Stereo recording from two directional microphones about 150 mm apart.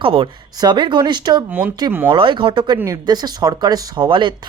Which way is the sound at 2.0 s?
35° right (ahead or behind).